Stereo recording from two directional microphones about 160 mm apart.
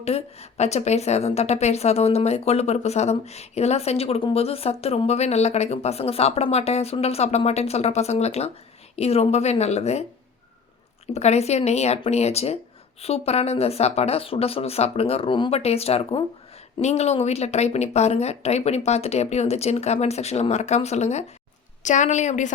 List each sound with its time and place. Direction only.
0.0 s a woman's voice: 40° left (ahead or behind)